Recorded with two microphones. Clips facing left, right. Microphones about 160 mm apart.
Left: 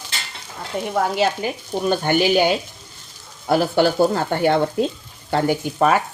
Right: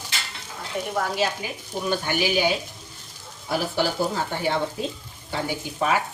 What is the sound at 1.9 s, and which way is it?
Speech, 55° left (ahead or behind).